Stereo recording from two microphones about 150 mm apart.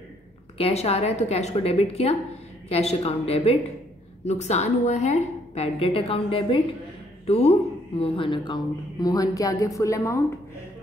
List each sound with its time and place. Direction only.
0.6 s a woman's voice: 45° left (ahead or behind); by 10.2 s 20° left (ahead or behind)